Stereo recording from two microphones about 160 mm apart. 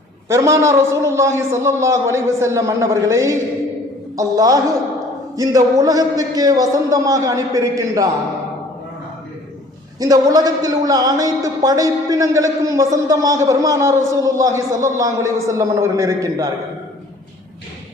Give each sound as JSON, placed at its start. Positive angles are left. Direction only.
{"t": 0.3, "sound": "a man's voice", "side_deg": -20}
{"t": 10.0, "sound": "a man's voice", "side_deg": -25}